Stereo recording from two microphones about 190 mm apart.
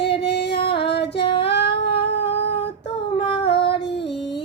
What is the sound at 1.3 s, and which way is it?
Child singing, 60° left (ahead or behind).